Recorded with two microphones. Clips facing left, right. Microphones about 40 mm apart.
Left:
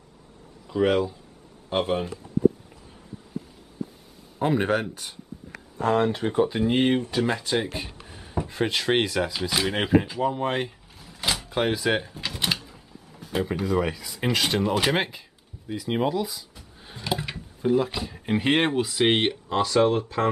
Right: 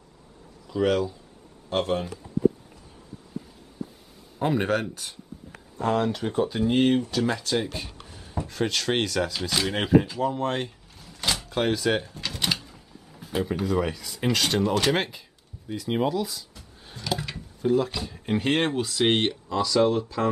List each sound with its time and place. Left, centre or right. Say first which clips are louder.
0.7 s speech: left 1 dB; centre
4.4 s speech: left 1 dB; centre
5.8 s speech: left 2 dB; left
6.3 s speech: even; centre
19.5 s speech: left 1 dB; left